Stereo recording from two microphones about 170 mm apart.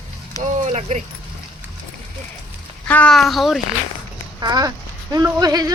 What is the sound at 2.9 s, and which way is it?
Speech, 5° left (ahead or behind).